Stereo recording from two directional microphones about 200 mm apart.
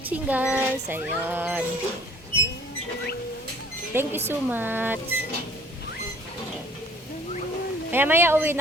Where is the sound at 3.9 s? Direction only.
10° right (ahead or behind).